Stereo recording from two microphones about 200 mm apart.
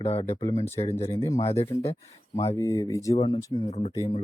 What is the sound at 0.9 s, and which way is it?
Speech, 30° left (ahead or behind).